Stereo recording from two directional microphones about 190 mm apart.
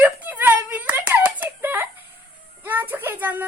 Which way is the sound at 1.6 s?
10° right (ahead or behind).